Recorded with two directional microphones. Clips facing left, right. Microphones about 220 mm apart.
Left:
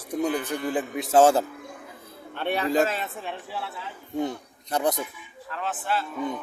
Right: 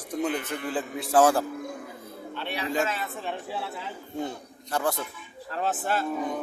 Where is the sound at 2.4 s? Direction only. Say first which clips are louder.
Left 7 dB; 50° left (ahead or behind).